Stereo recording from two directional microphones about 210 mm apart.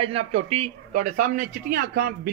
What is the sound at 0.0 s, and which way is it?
A man's voice, 30° right (ahead or behind).